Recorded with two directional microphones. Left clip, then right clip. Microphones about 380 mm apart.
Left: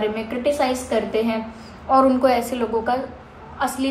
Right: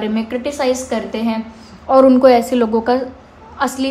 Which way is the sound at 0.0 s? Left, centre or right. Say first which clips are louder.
Right 1 dB; right.